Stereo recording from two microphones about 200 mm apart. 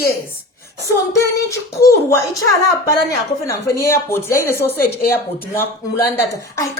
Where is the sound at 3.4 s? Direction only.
15° left (ahead or behind).